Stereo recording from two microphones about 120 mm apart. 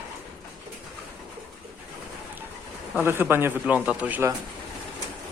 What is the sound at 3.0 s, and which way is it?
Speech, 20° right (ahead or behind).